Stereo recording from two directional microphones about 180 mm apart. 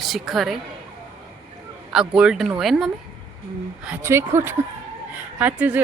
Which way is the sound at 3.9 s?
15° right (ahead or behind).